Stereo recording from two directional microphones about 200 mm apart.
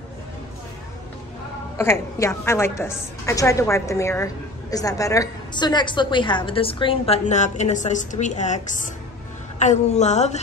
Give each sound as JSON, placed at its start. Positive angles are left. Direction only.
{"t": 1.8, "sound": "a woman's voice", "side_deg": 15}